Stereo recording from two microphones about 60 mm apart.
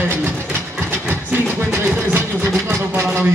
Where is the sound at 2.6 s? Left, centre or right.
Right.